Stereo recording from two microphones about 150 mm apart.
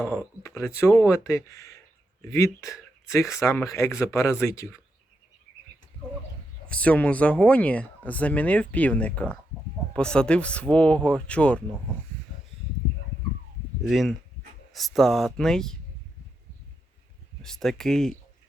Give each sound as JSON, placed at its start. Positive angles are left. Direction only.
{"t": 0.4, "sound": "speech", "side_deg": 20}
{"t": 6.7, "sound": "speech", "side_deg": 10}
{"t": 13.8, "sound": "speech", "side_deg": 0}
{"t": 17.4, "sound": "speech", "side_deg": 5}